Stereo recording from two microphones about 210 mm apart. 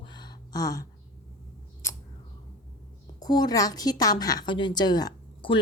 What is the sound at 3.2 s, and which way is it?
A woman's voice, 20° left (ahead or behind).